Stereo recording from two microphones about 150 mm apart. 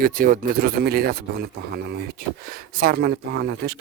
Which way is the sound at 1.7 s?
90° right.